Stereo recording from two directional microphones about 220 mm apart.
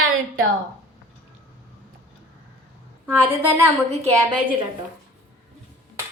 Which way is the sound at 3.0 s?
10° right (ahead or behind).